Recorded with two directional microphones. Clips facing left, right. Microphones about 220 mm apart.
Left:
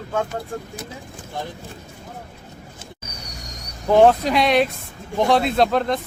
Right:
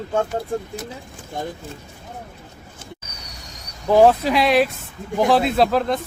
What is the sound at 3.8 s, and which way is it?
Speech, centre (ahead or behind).